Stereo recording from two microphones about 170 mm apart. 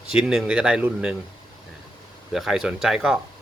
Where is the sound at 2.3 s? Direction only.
5° right (ahead or behind).